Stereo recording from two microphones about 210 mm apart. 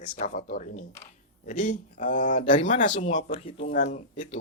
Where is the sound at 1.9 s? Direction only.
40° left (ahead or behind).